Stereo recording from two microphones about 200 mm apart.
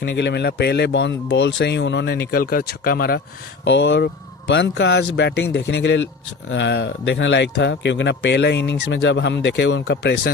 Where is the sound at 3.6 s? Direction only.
60° left (ahead or behind).